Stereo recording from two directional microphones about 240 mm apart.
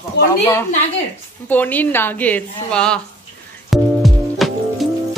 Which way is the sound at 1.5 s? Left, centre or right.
Centre.